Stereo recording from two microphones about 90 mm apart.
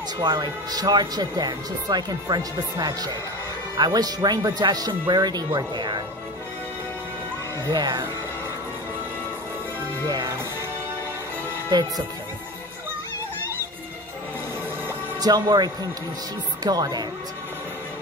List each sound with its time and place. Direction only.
0.2 s speech: 50° right (ahead or behind)
7.7 s speech: 55° right (ahead or behind)
10.0 s speech: 55° right (ahead or behind)
11.7 s speech: 50° right (ahead or behind)
15.1 s speech: 45° right (ahead or behind)